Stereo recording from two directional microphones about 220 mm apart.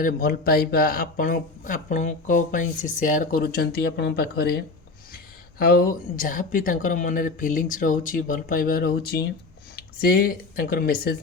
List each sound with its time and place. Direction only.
0.0 s speech: 40° left (ahead or behind)